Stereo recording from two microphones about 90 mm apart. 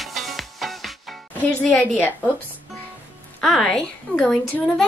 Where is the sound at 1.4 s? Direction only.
15° left (ahead or behind).